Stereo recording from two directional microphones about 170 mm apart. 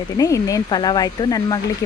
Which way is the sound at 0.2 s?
20° left (ahead or behind).